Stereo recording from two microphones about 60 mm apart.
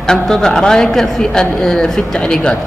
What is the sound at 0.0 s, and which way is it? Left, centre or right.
Speech, centre.